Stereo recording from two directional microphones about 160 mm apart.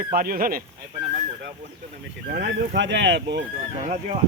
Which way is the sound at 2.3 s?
80° right.